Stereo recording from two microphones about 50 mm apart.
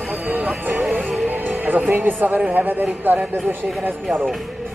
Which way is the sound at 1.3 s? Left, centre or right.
Right.